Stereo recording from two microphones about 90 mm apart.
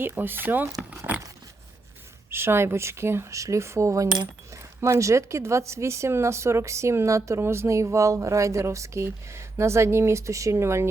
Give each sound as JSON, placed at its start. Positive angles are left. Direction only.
{"t": 0.2, "sound": "speech", "side_deg": -20}
{"t": 0.8, "sound": "keys jangling", "side_deg": -10}
{"t": 2.3, "sound": "speech", "side_deg": -25}